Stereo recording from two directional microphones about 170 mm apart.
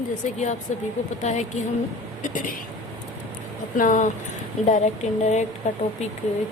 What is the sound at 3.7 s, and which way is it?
Speech, 50° left (ahead or behind).